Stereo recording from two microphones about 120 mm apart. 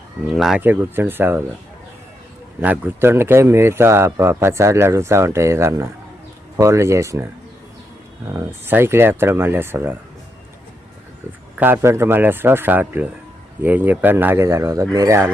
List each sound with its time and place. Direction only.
0.3 s speech: centre (ahead or behind)
0.6 s speech: 15° right (ahead or behind)
2.6 s a man's voice: 15° right (ahead or behind)
8.3 s a man's voice: 20° right (ahead or behind)
11.5 s a man's voice: 15° right (ahead or behind)